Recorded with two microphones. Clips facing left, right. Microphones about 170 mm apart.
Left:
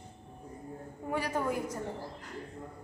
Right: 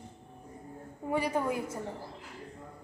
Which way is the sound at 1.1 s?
10° right (ahead or behind).